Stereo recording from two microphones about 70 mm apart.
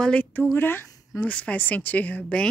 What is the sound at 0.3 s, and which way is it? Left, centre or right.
Speech, left.